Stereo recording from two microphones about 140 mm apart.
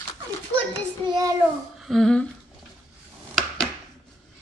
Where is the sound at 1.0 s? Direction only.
30° right (ahead or behind).